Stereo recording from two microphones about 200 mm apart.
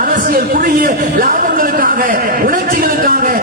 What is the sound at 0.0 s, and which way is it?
A man's voice, 45° right (ahead or behind).